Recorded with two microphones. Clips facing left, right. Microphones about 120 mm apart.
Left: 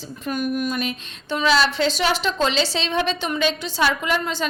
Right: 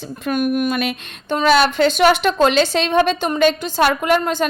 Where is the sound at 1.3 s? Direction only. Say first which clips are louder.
Right 5 dB; 50° right (ahead or behind).